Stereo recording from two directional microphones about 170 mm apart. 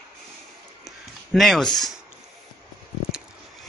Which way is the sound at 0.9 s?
Centre (ahead or behind).